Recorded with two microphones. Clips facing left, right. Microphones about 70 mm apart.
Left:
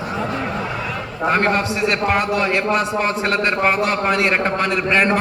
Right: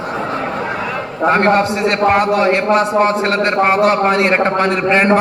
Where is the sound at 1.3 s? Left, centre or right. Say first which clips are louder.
Right 5 dB; right.